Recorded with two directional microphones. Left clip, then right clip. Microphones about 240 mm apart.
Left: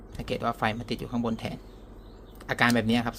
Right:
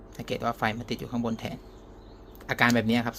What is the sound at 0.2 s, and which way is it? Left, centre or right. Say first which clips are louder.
Speech: even; centre.